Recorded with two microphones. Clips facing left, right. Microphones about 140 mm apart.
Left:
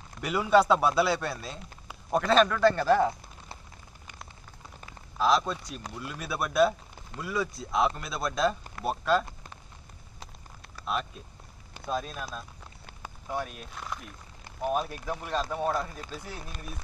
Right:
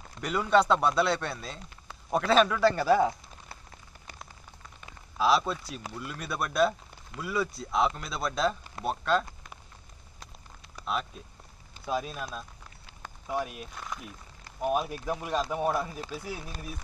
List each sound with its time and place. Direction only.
0.2 s speech: 5° left (ahead or behind)
5.1 s speech: 5° right (ahead or behind)
10.9 s speech: centre (ahead or behind)